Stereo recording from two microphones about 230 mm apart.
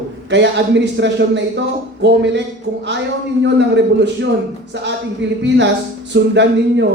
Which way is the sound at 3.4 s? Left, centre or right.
Right.